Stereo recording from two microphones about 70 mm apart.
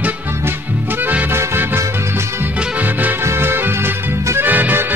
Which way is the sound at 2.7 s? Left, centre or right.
Right.